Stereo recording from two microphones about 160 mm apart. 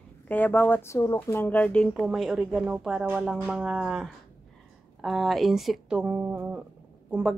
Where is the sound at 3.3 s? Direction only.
10° right (ahead or behind).